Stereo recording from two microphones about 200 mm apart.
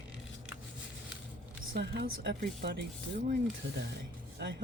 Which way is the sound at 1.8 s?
60° right (ahead or behind).